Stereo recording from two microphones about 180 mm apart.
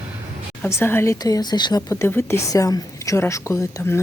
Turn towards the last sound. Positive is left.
turn(degrees=15)  # may be behind; listen again after turning